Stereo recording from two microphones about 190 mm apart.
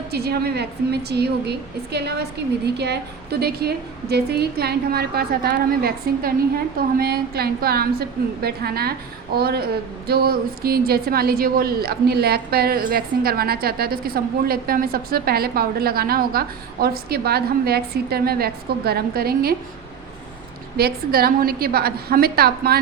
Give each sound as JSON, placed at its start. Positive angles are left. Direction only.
{"t": 0.1, "sound": "a woman's voice", "side_deg": -55}
{"t": 20.7, "sound": "a woman's voice", "side_deg": -55}